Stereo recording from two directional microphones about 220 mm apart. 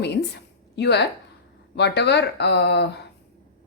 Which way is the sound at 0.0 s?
50° left (ahead or behind).